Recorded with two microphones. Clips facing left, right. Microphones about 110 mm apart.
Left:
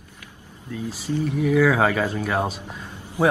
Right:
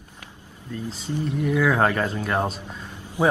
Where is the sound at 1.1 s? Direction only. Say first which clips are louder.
Left 3 dB; 20° right (ahead or behind).